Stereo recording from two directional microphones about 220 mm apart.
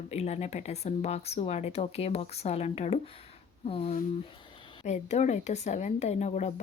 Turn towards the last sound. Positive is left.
turn(degrees=30)  # may be behind; listen again after turning